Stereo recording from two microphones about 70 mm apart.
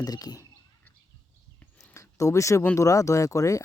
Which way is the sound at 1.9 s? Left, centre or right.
Left.